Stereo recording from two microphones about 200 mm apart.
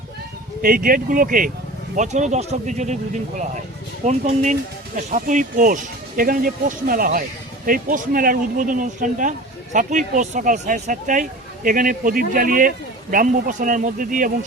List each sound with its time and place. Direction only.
0.6 s speech: 45° right (ahead or behind)